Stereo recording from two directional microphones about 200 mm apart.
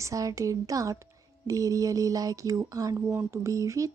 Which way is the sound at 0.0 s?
15° right (ahead or behind).